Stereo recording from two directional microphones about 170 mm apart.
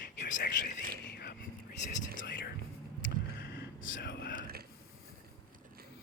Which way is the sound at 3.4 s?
60° left (ahead or behind).